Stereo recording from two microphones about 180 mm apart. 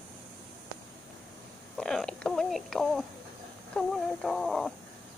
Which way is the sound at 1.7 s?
Centre (ahead or behind).